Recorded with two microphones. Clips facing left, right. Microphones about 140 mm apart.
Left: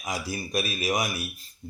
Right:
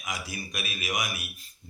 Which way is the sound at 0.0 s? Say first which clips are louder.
Left 5 dB; 35° left (ahead or behind).